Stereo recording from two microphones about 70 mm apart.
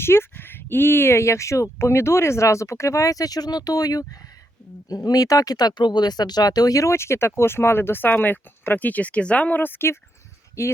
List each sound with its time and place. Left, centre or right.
0.0 s speech: left
6.9 s speech: left
10.6 s speech: left